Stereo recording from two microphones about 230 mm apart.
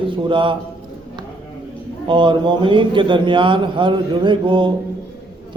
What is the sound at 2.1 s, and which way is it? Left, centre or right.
A man's voice, right.